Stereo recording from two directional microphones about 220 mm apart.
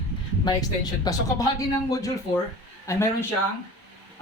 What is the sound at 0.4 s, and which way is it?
Speech, 15° left (ahead or behind).